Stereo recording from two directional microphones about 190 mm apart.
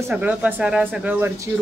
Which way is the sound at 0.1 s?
5° right (ahead or behind).